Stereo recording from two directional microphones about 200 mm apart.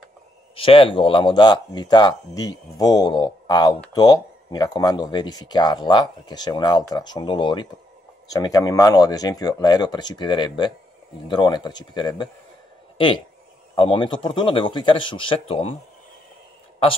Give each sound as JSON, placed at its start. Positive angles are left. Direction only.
{"t": 0.6, "sound": "speech", "side_deg": 25}